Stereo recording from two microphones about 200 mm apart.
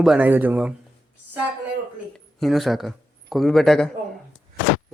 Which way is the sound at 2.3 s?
Centre (ahead or behind).